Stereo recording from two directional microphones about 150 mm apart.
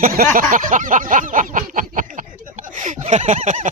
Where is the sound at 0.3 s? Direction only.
60° right (ahead or behind).